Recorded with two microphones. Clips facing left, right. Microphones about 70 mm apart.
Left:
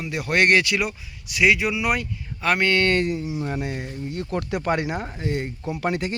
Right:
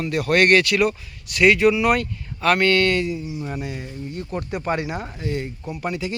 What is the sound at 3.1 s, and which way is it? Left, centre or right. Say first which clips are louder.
Speech: left 2 dB; left.